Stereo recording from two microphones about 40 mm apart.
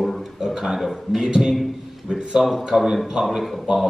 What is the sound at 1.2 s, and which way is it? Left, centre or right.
Speech, centre.